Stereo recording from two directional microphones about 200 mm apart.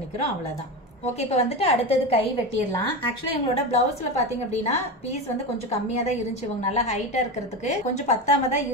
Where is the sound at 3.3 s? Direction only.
35° left (ahead or behind).